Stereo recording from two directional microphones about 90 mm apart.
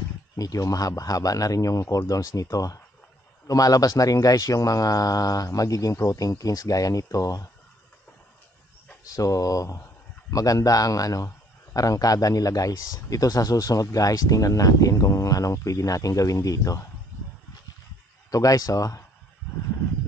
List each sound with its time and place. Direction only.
0.4 s a man's voice: 40° left (ahead or behind)
9.0 s a man's voice: 40° left (ahead or behind)
18.3 s a man's voice: 40° left (ahead or behind)